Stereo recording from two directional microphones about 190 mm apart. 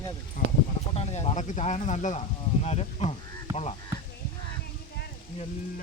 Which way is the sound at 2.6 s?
35° left (ahead or behind).